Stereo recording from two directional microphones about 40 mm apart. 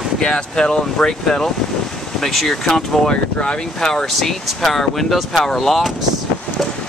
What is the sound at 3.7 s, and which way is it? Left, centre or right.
Speech, centre.